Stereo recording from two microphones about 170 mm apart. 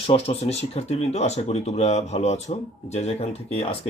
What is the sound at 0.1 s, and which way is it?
Speech, 35° left (ahead or behind).